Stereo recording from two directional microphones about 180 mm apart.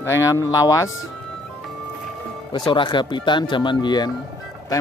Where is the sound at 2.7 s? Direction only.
25° left (ahead or behind).